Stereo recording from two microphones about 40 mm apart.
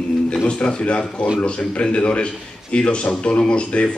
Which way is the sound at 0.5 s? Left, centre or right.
Left.